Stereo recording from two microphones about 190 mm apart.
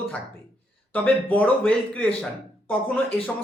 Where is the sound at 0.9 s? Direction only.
10° left (ahead or behind).